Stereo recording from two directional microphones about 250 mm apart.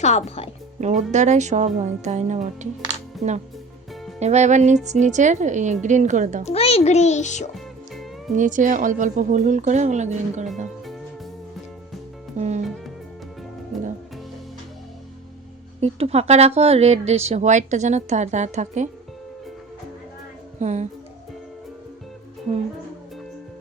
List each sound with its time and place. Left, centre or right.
0.0 s a child's voice: left
0.8 s speech: right
6.4 s a child's voice: left
8.4 s speech: right
12.4 s speech: right
15.8 s speech: right
20.6 s a woman's voice: right